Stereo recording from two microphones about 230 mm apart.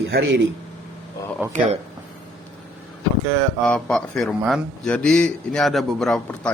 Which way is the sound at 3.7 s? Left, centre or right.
Centre.